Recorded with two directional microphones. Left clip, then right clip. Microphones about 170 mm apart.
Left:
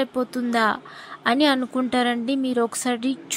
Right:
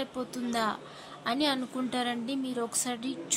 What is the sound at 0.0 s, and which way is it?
A woman's voice, 40° left (ahead or behind).